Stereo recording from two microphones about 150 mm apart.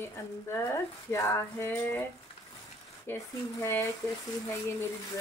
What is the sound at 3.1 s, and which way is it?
Speech, 15° left (ahead or behind).